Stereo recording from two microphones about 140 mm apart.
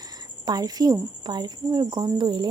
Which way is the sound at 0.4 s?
25° right (ahead or behind).